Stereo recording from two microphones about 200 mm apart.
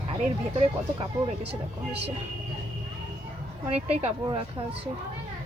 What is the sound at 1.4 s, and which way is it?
Speech, 55° right (ahead or behind).